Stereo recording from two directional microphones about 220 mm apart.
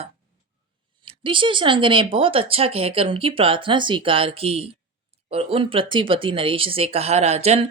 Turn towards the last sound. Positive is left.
turn(degrees=-30)  # may be behind; listen again after turning